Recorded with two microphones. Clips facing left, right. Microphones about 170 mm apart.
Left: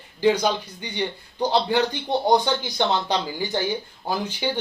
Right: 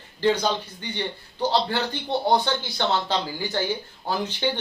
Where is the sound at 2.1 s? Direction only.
15° left (ahead or behind).